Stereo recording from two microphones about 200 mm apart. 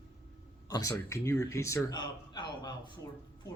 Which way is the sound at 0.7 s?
15° left (ahead or behind).